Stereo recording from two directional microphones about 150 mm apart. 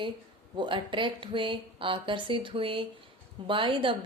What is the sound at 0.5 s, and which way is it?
Speech, 30° right (ahead or behind).